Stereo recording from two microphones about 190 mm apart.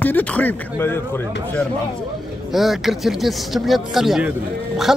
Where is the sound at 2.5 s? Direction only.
Centre (ahead or behind).